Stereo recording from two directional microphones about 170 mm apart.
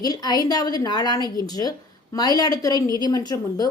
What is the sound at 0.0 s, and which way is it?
A woman's voice, 25° left (ahead or behind).